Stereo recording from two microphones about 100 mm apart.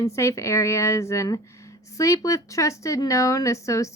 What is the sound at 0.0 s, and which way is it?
A woman's voice, 30° left (ahead or behind).